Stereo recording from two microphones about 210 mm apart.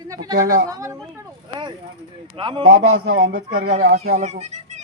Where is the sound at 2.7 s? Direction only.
90° right.